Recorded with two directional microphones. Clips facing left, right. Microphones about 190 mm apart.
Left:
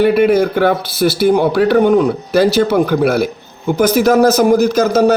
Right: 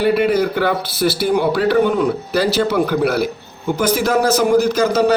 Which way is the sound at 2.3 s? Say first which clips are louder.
Left 6 dB; 50° left (ahead or behind).